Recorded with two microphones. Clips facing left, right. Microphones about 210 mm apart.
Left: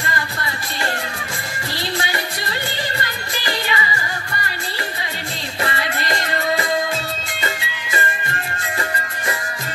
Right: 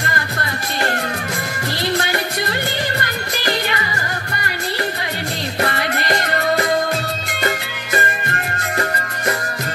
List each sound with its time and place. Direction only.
0.0 s music: 60° right (ahead or behind)
2.0 s music: 60° right (ahead or behind)
5.6 s music: 60° right (ahead or behind)